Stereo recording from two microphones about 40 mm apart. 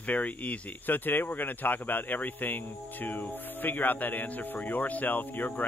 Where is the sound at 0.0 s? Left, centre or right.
Left.